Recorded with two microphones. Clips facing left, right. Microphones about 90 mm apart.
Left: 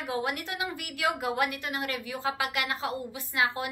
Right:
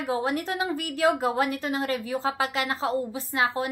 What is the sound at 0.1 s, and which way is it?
A woman's voice, 35° right (ahead or behind).